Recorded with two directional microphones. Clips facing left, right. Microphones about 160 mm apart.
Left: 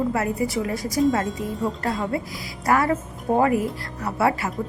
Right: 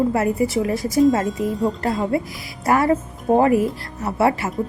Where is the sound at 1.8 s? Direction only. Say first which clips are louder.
Right 4 dB; 25° right (ahead or behind).